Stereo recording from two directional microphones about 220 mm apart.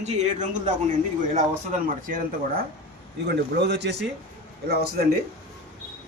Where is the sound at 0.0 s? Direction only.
30° right (ahead or behind).